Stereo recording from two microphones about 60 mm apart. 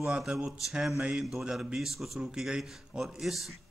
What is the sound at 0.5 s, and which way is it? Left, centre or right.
A man's voice, centre.